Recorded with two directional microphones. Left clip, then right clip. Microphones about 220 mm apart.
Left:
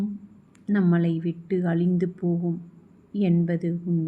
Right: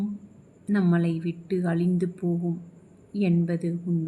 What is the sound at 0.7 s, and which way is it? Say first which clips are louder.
A woman's voice: left 1 dB; 5° right (ahead or behind).